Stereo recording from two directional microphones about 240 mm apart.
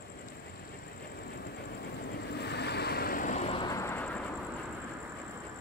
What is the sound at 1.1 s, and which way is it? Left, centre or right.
Train, left.